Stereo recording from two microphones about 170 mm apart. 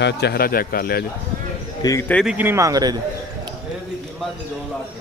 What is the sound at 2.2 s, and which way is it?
Speech, 10° right (ahead or behind).